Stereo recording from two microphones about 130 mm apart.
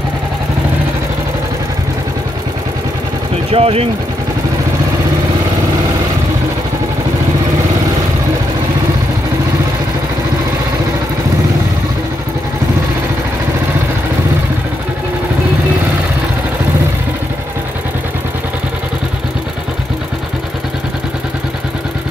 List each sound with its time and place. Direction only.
3.5 s speech: 50° right (ahead or behind)